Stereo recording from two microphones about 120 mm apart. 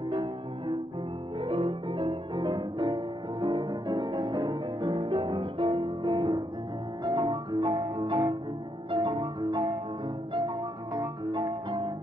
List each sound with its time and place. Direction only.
0.1 s music: 45° right (ahead or behind)
4.9 s music: 50° right (ahead or behind)
11.3 s music: 40° right (ahead or behind)